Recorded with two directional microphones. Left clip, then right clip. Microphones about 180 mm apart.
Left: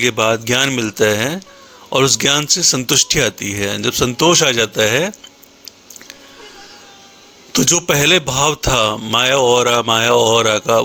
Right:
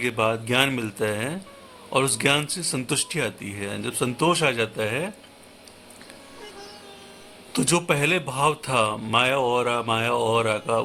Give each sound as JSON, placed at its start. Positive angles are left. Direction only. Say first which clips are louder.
{"t": 0.0, "sound": "a man's voice", "louder": "left 9 dB", "side_deg": 35}
{"t": 7.5, "sound": "a man's voice", "louder": "left 8 dB", "side_deg": 30}